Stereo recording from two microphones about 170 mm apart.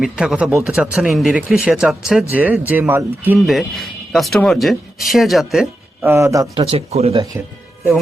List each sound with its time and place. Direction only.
0.0 s speech: 5° right (ahead or behind)
3.3 s speech: centre (ahead or behind)
6.1 s speech: 15° right (ahead or behind)
6.6 s speech: 35° right (ahead or behind)